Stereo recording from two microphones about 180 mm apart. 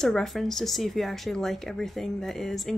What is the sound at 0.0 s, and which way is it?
Speech, 5° left (ahead or behind).